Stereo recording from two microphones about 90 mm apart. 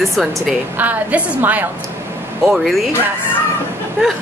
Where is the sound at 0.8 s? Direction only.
15° right (ahead or behind).